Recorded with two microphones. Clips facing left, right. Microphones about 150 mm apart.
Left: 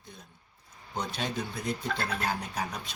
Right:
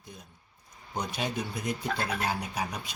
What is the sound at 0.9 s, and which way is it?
Speech, 15° right (ahead or behind).